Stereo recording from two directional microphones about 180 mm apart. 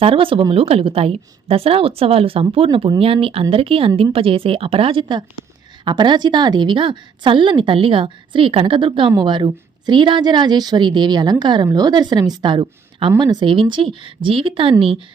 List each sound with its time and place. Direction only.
0.0 s a woman's voice: 30° right (ahead or behind)